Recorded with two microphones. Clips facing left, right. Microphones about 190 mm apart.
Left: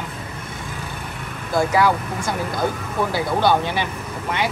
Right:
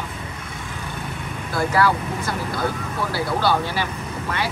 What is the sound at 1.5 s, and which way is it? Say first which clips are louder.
Speech: left 2 dB; 15° left (ahead or behind).